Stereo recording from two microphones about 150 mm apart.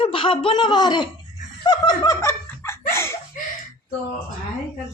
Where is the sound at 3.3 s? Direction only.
65° left (ahead or behind).